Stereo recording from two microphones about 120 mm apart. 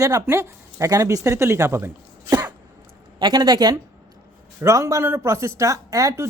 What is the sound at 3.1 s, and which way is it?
Speech, 35° right (ahead or behind).